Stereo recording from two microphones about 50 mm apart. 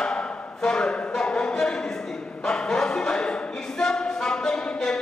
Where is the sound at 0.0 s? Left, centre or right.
Centre.